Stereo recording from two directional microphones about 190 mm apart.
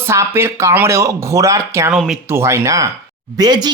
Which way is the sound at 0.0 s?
15° right (ahead or behind).